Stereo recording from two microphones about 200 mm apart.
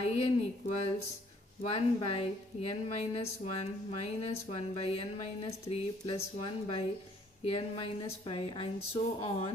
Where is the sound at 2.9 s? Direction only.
30° left (ahead or behind).